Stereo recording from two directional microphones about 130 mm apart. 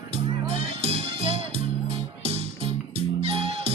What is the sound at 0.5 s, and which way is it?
Music, 50° right (ahead or behind).